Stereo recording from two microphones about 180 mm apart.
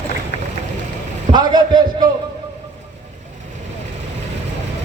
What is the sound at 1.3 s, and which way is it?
Speech, 25° right (ahead or behind).